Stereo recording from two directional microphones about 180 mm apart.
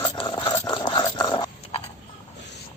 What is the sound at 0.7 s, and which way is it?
Dog, 25° left (ahead or behind).